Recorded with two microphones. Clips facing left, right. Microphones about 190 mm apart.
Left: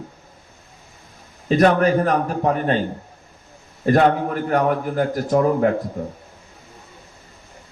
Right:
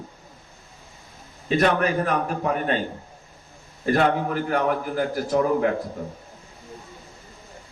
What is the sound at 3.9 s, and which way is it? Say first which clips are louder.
A man's voice: left 4 dB; 40° left (ahead or behind).